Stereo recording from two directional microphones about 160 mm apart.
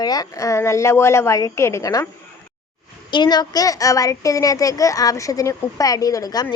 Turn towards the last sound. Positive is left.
turn(degrees=25)  # may be behind; listen again after turning